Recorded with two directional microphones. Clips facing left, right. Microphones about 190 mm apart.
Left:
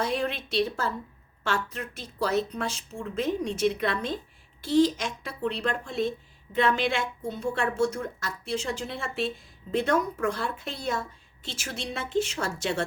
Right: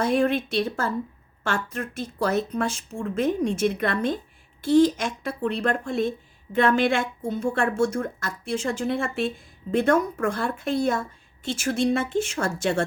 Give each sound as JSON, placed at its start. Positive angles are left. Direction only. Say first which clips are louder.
{"t": 0.0, "sound": "speech", "louder": "right 7 dB", "side_deg": -50}